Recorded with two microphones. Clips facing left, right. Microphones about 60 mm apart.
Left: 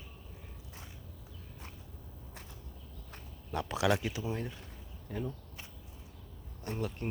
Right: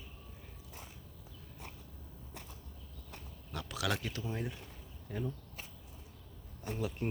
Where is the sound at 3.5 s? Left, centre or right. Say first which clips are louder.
Left 7 dB; left; by 5.3 s centre.